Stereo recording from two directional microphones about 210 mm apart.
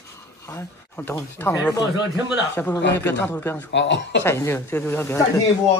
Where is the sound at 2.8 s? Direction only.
55° left (ahead or behind).